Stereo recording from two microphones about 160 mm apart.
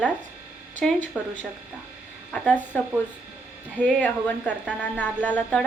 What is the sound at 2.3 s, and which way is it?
Speech, 10° left (ahead or behind).